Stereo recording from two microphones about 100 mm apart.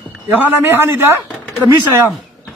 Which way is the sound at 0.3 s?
25° right (ahead or behind).